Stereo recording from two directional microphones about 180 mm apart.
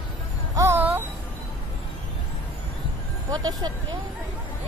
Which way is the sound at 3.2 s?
20° right (ahead or behind).